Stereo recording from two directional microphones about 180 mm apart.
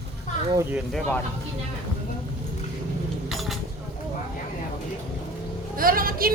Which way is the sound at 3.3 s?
Centre (ahead or behind).